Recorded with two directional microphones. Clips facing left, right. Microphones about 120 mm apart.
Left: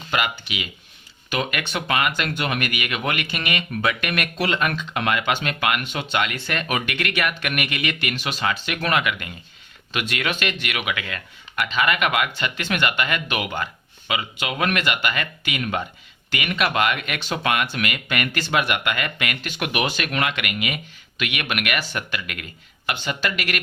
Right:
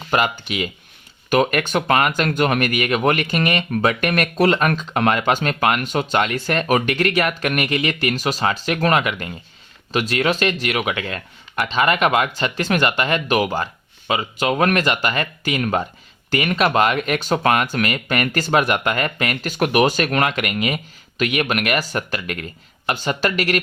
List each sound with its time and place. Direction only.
0.1 s speech: 40° right (ahead or behind)